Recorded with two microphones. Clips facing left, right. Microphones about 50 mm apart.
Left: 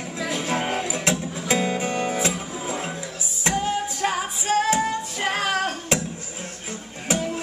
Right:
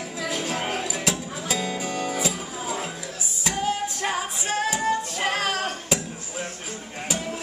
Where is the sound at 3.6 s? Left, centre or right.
Centre.